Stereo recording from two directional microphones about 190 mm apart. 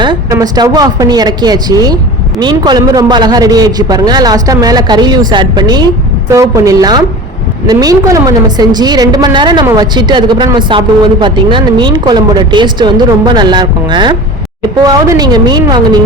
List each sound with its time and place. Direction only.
0.0 s a woman's voice: 20° right (ahead or behind)